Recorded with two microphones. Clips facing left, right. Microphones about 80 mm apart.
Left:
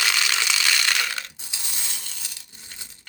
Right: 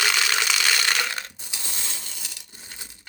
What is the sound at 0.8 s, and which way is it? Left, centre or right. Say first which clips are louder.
Crushing: even; centre.